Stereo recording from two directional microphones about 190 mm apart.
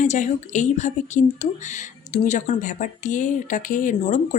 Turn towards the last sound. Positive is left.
turn(degrees=40)  # may be behind; listen again after turning